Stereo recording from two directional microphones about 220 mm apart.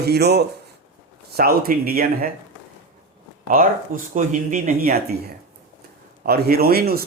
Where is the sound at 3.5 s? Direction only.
40° right (ahead or behind).